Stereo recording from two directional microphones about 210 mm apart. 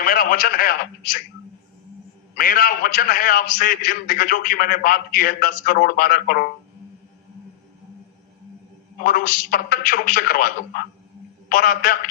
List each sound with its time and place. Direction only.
0.0 s a man's voice: 40° left (ahead or behind)
2.3 s a man's voice: 45° left (ahead or behind)
9.0 s a man's voice: 45° left (ahead or behind)